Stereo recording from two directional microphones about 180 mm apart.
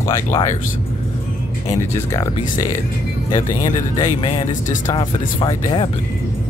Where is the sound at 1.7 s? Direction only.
15° left (ahead or behind).